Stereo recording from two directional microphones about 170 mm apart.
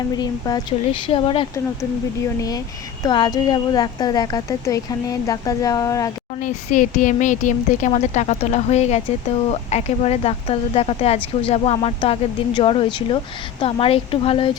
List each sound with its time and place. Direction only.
0.2 s a woman's voice: 25° left (ahead or behind)
2.2 s a woman's voice: 20° left (ahead or behind)
6.4 s a woman's voice: 50° left (ahead or behind); by 14.5 s 30° left (ahead or behind)